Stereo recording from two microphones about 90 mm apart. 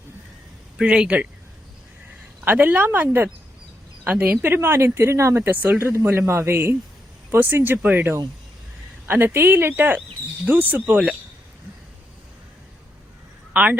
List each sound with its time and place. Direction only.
0.8 s speech: 10° right (ahead or behind)
2.4 s speech: 20° right (ahead or behind)
5.9 s speech: 30° right (ahead or behind); by 11.0 s 15° right (ahead or behind)
13.5 s speech: 15° right (ahead or behind)